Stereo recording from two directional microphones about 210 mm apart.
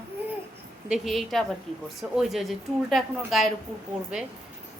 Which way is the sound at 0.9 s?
Centre (ahead or behind).